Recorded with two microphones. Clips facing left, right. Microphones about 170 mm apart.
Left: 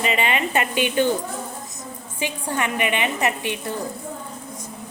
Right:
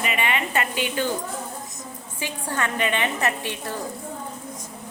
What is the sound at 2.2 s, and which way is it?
A woman's voice, 15° left (ahead or behind).